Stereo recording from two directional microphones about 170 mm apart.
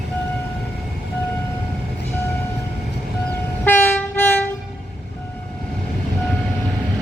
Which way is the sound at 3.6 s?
10° left (ahead or behind).